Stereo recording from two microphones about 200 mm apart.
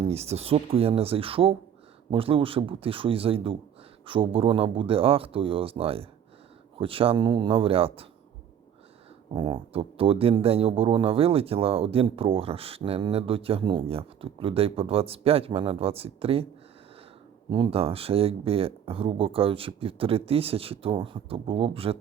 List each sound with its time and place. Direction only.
0.0 s speech: 30° right (ahead or behind)
9.3 s speech: 20° right (ahead or behind)
17.5 s speech: 25° right (ahead or behind)